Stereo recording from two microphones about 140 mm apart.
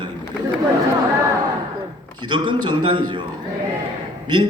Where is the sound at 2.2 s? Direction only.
35° right (ahead or behind).